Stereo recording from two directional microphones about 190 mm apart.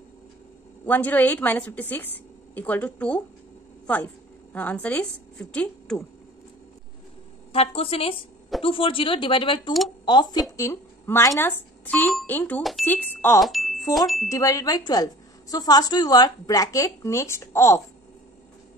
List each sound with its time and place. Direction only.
0.8 s a woman's voice: 10° left (ahead or behind)
7.5 s a woman's voice: 30° left (ahead or behind); by 13.4 s 10° left (ahead or behind)
13.4 s speech: centre (ahead or behind)
13.9 s wind chime: centre (ahead or behind)
14.3 s a woman's voice: 20° left (ahead or behind)